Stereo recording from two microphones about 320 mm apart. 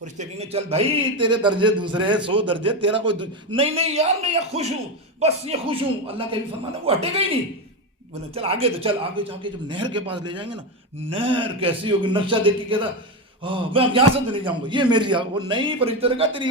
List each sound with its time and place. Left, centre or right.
0.0 s a man's voice: right
8.4 s a man's voice: centre